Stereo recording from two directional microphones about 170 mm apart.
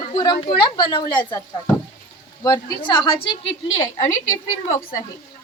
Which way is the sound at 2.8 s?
25° left (ahead or behind).